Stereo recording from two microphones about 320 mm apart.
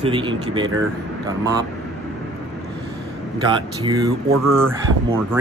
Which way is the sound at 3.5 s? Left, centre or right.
Centre.